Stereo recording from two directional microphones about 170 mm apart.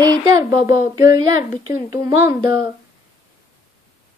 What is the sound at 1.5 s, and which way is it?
Speech, 50° left (ahead or behind).